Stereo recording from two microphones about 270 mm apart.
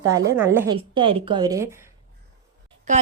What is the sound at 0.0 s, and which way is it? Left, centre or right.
Speech, centre.